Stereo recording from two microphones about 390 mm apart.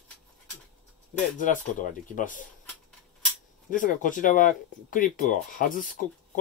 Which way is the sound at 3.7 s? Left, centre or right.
Centre.